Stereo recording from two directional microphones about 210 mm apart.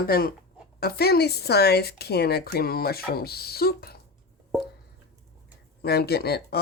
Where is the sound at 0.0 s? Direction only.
45° left (ahead or behind).